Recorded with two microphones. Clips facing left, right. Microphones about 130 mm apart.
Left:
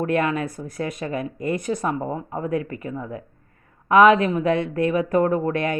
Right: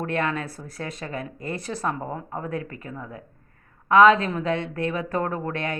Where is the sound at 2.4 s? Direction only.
30° right (ahead or behind).